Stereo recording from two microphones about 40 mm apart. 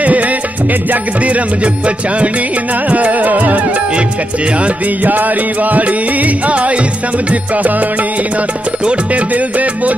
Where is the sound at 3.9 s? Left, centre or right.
Right.